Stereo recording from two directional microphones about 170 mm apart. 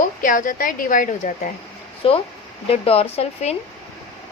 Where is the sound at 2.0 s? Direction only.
30° left (ahead or behind).